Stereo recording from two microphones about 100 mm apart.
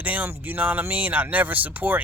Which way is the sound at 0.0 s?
15° right (ahead or behind).